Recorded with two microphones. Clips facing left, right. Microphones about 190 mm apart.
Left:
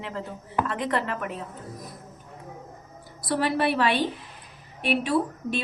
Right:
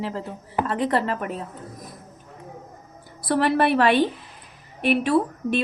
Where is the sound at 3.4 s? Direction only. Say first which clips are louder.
Right 5 dB; 60° right (ahead or behind).